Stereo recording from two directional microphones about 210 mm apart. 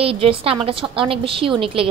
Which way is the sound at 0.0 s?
25° right (ahead or behind).